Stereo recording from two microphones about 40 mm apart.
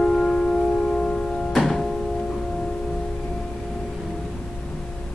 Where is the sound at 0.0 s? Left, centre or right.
Centre.